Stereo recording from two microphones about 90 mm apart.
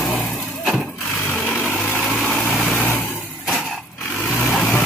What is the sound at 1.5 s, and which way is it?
Vehicle, 15° left (ahead or behind).